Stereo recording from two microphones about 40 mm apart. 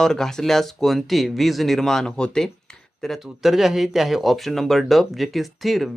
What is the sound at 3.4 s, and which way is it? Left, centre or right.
Speech, centre.